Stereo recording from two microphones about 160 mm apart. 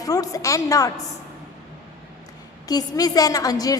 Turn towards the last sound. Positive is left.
turn(degrees=20)  # may be behind; listen again after turning